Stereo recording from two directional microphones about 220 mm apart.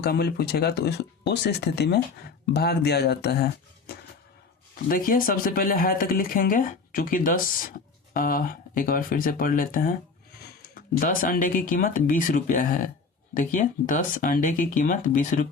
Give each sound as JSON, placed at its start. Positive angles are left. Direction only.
{"t": 0.0, "sound": "speech", "side_deg": 45}